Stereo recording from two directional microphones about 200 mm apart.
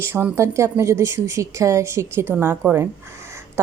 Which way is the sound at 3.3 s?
15° right (ahead or behind).